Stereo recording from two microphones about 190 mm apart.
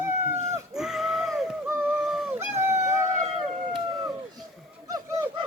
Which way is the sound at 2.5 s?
15° right (ahead or behind).